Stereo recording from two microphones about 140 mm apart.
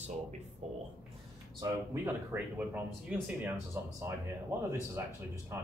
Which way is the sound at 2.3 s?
10° right (ahead or behind).